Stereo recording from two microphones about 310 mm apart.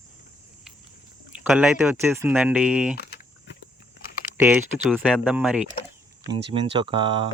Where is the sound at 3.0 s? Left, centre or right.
Left.